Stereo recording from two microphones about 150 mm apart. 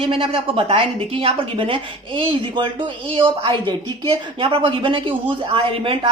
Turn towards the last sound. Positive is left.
turn(degrees=-35)  # may be behind; listen again after turning